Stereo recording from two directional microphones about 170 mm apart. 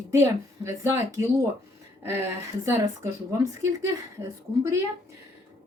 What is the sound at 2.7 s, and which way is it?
Speech, 15° right (ahead or behind).